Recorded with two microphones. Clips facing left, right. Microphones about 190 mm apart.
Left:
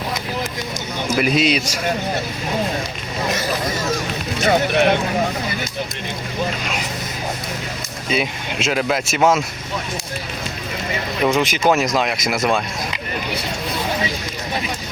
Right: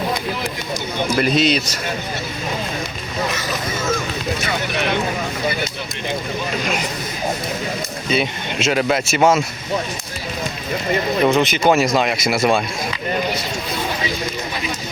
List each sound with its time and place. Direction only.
1.1 s speech: centre (ahead or behind)
4.4 s speech: 50° left (ahead or behind)
8.1 s speech: centre (ahead or behind)
11.2 s speech: centre (ahead or behind)